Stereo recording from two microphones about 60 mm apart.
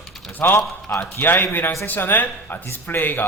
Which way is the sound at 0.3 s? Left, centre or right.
Left.